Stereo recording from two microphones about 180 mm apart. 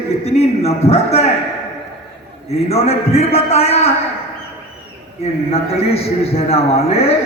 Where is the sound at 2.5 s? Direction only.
35° left (ahead or behind).